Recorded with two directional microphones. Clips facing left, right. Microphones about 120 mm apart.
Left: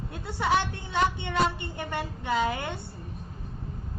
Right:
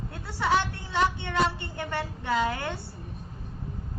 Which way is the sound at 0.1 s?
20° left (ahead or behind).